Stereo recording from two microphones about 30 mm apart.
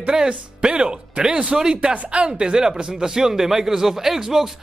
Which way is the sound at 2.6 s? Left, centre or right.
Centre.